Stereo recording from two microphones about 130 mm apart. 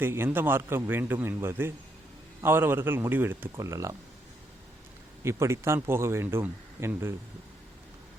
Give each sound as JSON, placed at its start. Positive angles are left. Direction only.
{"t": 0.0, "sound": "a man's voice", "side_deg": -15}
{"t": 5.2, "sound": "speech", "side_deg": -20}